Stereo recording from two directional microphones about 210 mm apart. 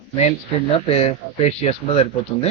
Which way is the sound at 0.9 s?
30° left (ahead or behind).